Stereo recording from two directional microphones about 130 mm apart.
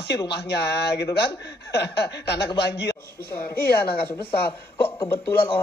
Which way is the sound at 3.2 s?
20° left (ahead or behind).